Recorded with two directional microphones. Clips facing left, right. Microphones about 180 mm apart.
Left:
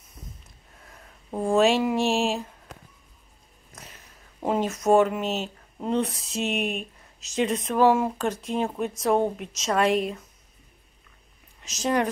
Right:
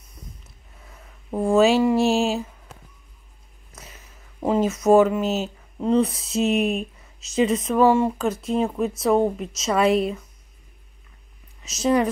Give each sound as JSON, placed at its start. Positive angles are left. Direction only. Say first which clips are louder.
{"t": 1.3, "sound": "speech", "louder": "right 3 dB", "side_deg": 0}
{"t": 4.8, "sound": "speech", "louder": "right 4 dB", "side_deg": -5}
{"t": 6.4, "sound": "speech", "louder": "right 6 dB", "side_deg": -40}
{"t": 7.2, "sound": "speech", "louder": "right 5 dB", "side_deg": 0}
{"t": 11.6, "sound": "speech", "louder": "right 4 dB", "side_deg": -5}